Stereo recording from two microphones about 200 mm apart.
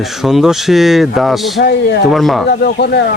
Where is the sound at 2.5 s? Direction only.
55° left (ahead or behind).